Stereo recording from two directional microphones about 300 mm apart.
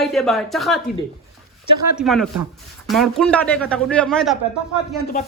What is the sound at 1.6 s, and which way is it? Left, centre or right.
Speech, right.